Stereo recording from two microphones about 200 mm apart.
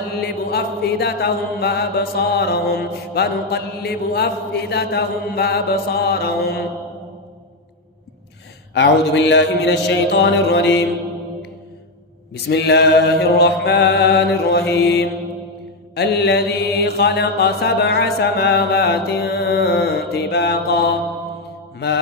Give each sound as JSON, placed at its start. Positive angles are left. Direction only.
{"t": 0.5, "sound": "chant", "side_deg": 50}
{"t": 8.7, "sound": "mantra", "side_deg": 60}
{"t": 12.4, "sound": "mantra", "side_deg": 60}
{"t": 14.7, "sound": "chant", "side_deg": 55}
{"t": 15.9, "sound": "mantra", "side_deg": 55}